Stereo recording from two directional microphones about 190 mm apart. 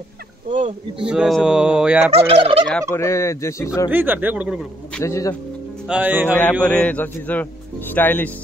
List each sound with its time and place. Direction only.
0.5 s speech: 40° right (ahead or behind)
1.0 s speech: 5° right (ahead or behind)
2.1 s fowl: 30° right (ahead or behind)
2.9 s speech: 15° left (ahead or behind)
3.9 s speech: 10° right (ahead or behind)
4.9 s speech: 15° left (ahead or behind)
5.9 s speech: 10° right (ahead or behind)
6.6 s speech: 5° left (ahead or behind)